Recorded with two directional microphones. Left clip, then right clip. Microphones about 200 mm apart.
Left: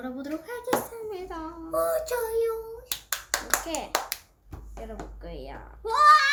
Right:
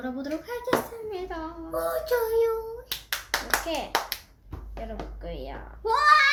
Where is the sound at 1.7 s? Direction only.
15° left (ahead or behind).